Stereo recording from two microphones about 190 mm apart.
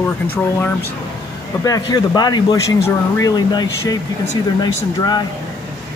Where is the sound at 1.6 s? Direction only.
20° left (ahead or behind).